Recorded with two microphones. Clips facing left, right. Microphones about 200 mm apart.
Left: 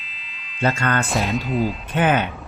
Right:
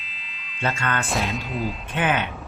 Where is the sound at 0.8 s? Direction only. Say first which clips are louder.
Left 4 dB; 40° left (ahead or behind).